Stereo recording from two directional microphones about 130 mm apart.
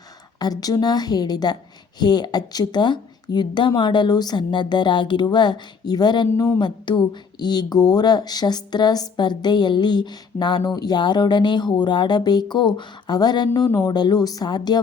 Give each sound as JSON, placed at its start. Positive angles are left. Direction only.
{"t": 0.3, "sound": "speech", "side_deg": 30}
{"t": 6.6, "sound": "speech", "side_deg": 35}
{"t": 13.8, "sound": "speech", "side_deg": 30}